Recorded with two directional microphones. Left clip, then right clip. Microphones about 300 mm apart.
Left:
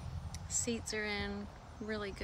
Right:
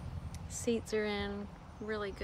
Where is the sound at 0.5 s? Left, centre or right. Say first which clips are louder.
Right 4 dB; centre.